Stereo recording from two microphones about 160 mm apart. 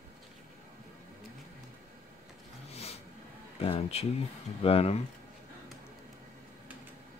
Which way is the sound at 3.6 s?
40° left (ahead or behind).